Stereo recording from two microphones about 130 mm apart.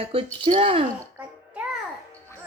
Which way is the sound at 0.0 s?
45° right (ahead or behind).